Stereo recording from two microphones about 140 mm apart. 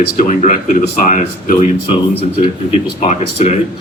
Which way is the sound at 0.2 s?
60° left (ahead or behind).